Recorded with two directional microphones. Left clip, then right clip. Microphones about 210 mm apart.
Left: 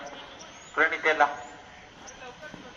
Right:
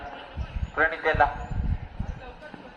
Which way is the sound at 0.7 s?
50° right (ahead or behind).